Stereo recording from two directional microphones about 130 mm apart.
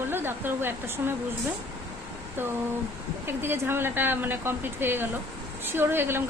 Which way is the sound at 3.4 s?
20° right (ahead or behind).